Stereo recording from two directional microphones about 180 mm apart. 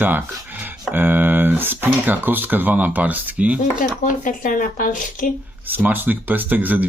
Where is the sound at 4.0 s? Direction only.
45° left (ahead or behind).